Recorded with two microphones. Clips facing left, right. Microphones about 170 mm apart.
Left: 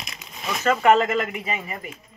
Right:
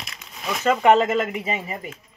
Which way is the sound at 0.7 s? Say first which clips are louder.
Right 1 dB; 20° right (ahead or behind).